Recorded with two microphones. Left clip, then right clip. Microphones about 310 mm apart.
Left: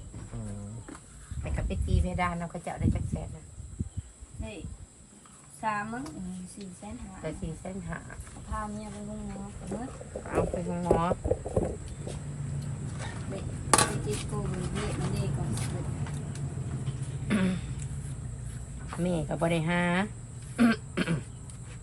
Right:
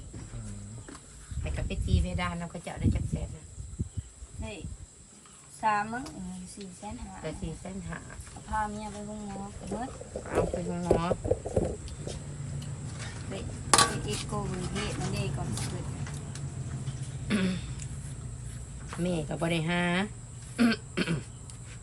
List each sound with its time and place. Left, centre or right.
1.5 s speech: centre
3.8 s cricket: centre
5.5 s a woman's voice: centre
11.4 s a sound: centre
12.5 s dishes: centre
17.2 s a sound: centre
18.9 s a woman's voice: centre
20.6 s throat clearing: centre